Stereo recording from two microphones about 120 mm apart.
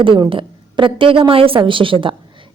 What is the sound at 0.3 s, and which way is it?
A woman's voice, 45° right (ahead or behind).